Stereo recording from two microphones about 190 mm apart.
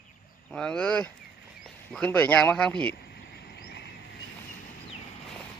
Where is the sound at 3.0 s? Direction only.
60° left (ahead or behind).